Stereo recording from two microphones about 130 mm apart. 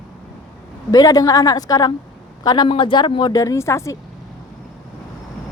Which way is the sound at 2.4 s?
35° left (ahead or behind).